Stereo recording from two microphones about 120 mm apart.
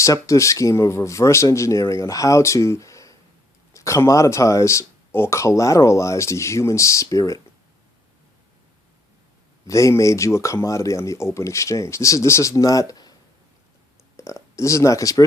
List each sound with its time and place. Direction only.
0.0 s speech: 25° left (ahead or behind)
9.6 s speech: 25° left (ahead or behind)
14.2 s speech: 25° left (ahead or behind)